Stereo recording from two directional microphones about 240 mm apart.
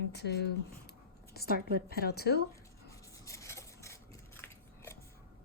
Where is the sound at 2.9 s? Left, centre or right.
Centre.